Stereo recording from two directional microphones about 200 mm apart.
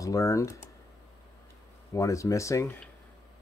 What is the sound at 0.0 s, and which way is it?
Speech, 15° left (ahead or behind).